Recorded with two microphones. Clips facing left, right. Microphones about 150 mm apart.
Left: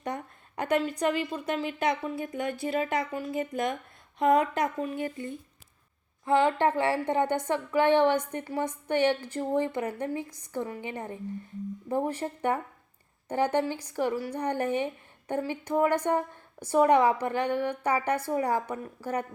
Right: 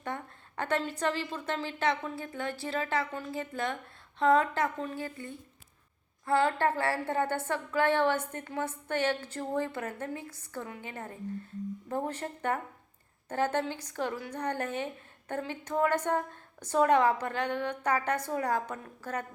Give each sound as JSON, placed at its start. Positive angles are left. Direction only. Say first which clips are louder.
{"t": 0.0, "sound": "a woman's voice", "louder": "left 3 dB", "side_deg": 15}